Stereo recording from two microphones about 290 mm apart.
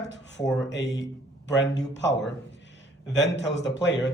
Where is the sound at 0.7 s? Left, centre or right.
Left.